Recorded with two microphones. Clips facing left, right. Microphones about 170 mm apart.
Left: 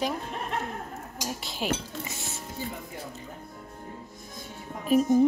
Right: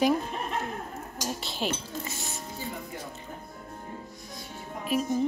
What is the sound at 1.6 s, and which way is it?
Speech, 10° left (ahead or behind).